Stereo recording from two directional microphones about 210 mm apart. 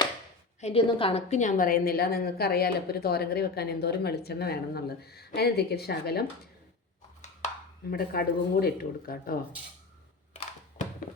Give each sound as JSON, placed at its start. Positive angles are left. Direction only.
{"t": 0.6, "sound": "a woman's voice", "side_deg": 25}
{"t": 7.2, "sound": "a sound", "side_deg": 35}
{"t": 7.9, "sound": "a woman's voice", "side_deg": 45}